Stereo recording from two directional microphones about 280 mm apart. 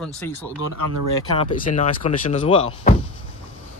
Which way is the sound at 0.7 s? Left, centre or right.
Right.